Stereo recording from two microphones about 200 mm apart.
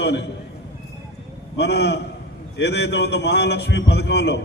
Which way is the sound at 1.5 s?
60° left (ahead or behind).